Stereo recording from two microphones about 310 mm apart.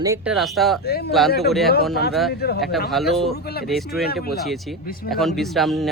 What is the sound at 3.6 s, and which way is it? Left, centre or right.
Speech, centre.